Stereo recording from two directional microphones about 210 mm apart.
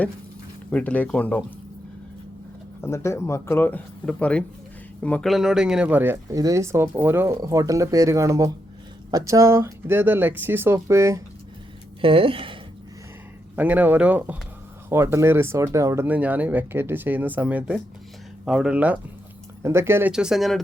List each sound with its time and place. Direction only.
0.7 s speech: 5° left (ahead or behind)
2.8 s speech: 10° left (ahead or behind); by 11.2 s 15° right (ahead or behind)
12.0 s speech: 25° right (ahead or behind)
13.6 s speech: 10° right (ahead or behind)